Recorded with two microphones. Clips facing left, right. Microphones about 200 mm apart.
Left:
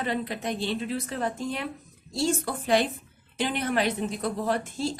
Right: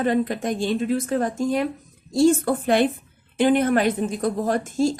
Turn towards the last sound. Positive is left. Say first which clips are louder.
# right 7 dB
turn(degrees=-45)  # may be behind; listen again after turning